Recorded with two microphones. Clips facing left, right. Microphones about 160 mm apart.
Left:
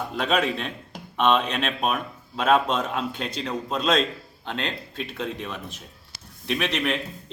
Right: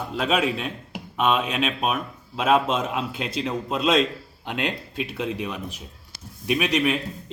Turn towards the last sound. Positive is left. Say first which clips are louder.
# right 3 dB
turn(degrees=-10)  # may be behind; listen again after turning